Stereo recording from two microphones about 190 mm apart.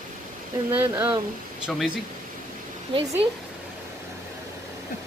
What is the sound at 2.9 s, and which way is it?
Speech, 30° right (ahead or behind).